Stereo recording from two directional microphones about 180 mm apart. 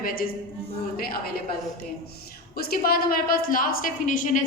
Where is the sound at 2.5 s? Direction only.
55° left (ahead or behind).